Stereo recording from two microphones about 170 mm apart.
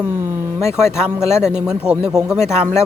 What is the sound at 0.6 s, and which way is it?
Speech, 15° left (ahead or behind).